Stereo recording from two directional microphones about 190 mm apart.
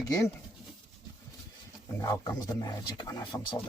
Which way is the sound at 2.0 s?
20° left (ahead or behind).